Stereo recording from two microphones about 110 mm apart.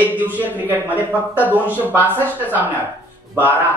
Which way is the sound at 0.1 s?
15° right (ahead or behind).